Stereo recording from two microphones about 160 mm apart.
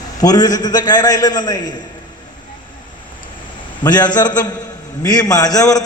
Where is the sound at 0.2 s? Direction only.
25° left (ahead or behind).